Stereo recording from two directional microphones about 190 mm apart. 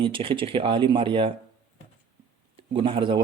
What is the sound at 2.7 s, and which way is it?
Speech, 25° right (ahead or behind).